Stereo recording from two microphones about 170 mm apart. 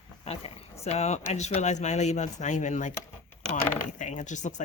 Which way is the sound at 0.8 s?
40° left (ahead or behind).